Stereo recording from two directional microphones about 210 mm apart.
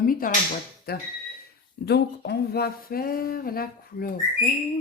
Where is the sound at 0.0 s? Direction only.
45° left (ahead or behind).